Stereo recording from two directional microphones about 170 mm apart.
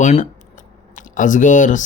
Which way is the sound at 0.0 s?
45° left (ahead or behind).